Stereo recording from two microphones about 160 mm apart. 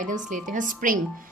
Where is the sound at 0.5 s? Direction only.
55° right (ahead or behind).